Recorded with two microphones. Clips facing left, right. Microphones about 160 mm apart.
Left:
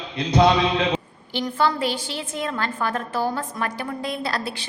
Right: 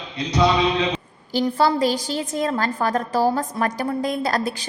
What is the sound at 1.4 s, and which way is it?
A woman's voice, 40° right (ahead or behind).